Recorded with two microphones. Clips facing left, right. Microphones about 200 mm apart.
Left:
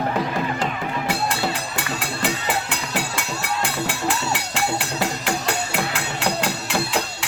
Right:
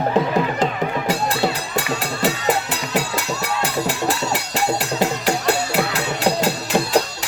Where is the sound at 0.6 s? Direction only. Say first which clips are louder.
Right 4 dB; 40° right (ahead or behind).